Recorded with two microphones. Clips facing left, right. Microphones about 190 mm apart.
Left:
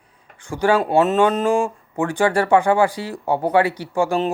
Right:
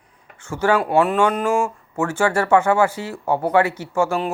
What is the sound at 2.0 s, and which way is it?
A man's voice, 15° left (ahead or behind).